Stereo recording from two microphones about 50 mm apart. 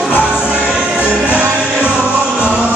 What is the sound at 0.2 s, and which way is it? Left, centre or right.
Music, right.